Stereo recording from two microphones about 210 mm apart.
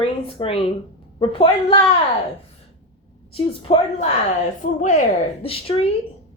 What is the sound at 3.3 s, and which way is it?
Speech, 25° left (ahead or behind).